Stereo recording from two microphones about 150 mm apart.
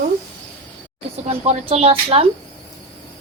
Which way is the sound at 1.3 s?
40° right (ahead or behind).